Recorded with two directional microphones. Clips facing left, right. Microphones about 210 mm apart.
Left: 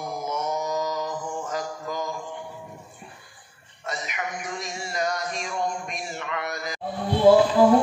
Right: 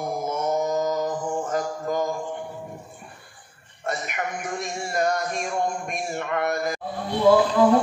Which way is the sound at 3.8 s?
55° right (ahead or behind).